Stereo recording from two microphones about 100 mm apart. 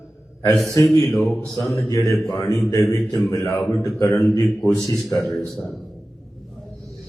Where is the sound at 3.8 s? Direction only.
30° left (ahead or behind).